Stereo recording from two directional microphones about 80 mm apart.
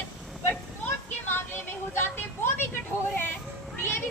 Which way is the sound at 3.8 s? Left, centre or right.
Left.